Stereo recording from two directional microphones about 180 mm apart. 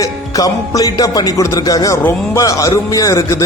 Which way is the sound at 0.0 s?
20° left (ahead or behind).